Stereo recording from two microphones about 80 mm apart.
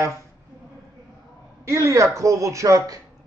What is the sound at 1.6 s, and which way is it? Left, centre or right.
A woman's voice, right.